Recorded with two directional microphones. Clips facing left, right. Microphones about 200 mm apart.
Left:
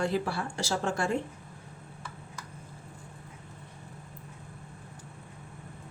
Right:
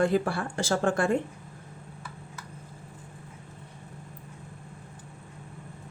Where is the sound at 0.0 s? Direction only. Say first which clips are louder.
Right 5 dB; 55° right (ahead or behind).